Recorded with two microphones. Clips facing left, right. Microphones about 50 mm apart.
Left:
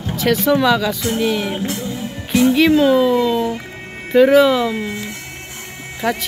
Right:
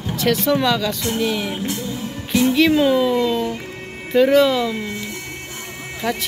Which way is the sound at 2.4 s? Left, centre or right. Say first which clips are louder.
Left 3 dB; centre.